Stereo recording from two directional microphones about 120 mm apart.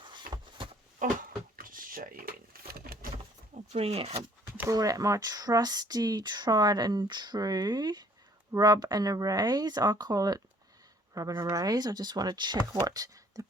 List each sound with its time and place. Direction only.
0.0 s a sound: 40° right (ahead or behind)
3.5 s speech: 60° right (ahead or behind)
4.7 s speech: 30° right (ahead or behind)